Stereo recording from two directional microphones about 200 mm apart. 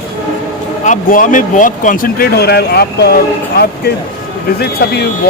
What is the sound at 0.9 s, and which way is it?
Speech, 45° left (ahead or behind).